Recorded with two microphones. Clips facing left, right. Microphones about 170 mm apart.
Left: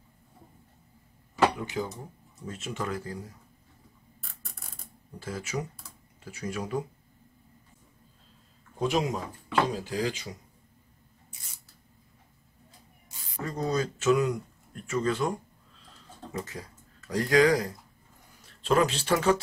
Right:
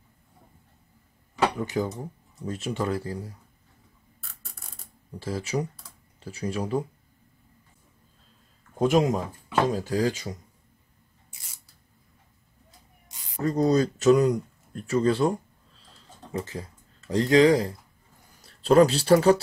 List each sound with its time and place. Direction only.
1.7 s speech: 40° right (ahead or behind)
4.2 s a sound: centre (ahead or behind)
5.2 s speech: 35° right (ahead or behind)
8.7 s speech: 50° right (ahead or behind)
13.4 s speech: 40° right (ahead or behind)
18.4 s speech: 35° right (ahead or behind)